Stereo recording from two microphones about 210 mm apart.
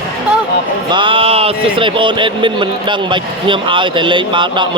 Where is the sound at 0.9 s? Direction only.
25° right (ahead or behind).